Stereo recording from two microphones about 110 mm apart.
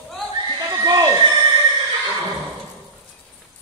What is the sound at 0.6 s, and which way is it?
Neigh, 35° right (ahead or behind).